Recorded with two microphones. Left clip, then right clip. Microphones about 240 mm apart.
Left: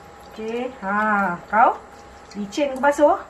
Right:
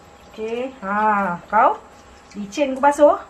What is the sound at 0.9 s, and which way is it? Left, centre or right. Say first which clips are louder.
A woman's voice: right 2 dB; right.